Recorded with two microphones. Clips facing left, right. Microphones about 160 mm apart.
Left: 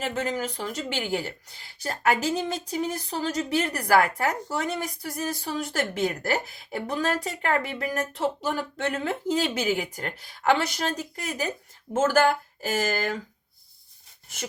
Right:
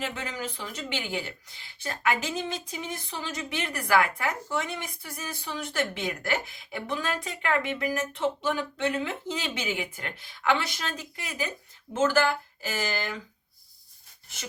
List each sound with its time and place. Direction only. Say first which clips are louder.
0.0 s a woman's voice: left 6 dB; 40° left (ahead or behind)